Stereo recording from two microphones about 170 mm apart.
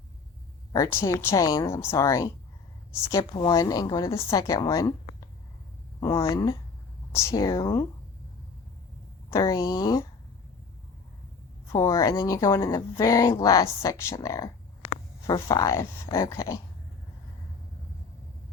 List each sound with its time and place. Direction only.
0.7 s speech: 15° left (ahead or behind)
6.0 s speech: 20° left (ahead or behind)
9.3 s speech: 20° left (ahead or behind)
11.7 s speech: 20° left (ahead or behind)